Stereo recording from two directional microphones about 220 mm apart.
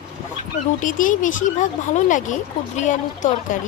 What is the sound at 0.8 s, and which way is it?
Speech, 35° left (ahead or behind).